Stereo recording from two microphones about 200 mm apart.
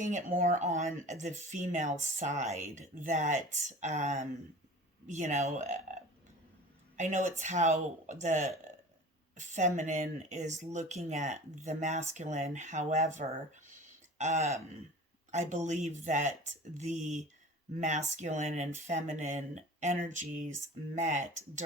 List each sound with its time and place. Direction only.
0.0 s speech: 40° right (ahead or behind)